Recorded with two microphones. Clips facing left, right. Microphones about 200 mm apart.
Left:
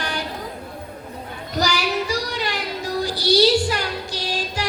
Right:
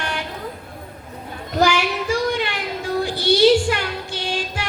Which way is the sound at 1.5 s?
40° left (ahead or behind).